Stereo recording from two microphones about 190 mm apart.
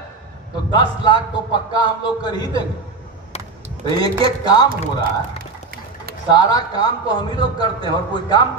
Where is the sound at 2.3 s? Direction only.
20° left (ahead or behind).